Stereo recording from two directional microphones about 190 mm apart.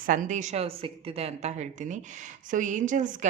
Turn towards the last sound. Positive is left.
turn(degrees=-40)  # may be behind; listen again after turning